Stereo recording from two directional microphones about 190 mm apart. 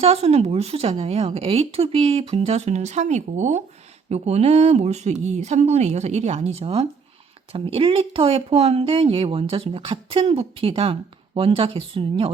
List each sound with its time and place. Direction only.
0.0 s speech: 30° right (ahead or behind)